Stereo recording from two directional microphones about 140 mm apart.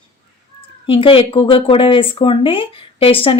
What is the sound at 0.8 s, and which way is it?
A woman's voice, 40° left (ahead or behind).